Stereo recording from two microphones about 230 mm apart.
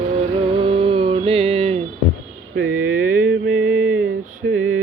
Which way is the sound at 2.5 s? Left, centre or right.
Right.